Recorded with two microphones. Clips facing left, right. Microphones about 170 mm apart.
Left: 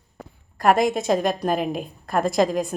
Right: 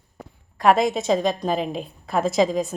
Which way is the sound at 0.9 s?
Centre (ahead or behind).